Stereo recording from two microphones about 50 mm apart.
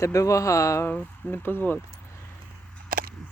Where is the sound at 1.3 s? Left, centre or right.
Left.